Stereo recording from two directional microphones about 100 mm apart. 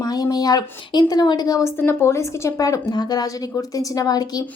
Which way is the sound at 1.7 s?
25° left (ahead or behind).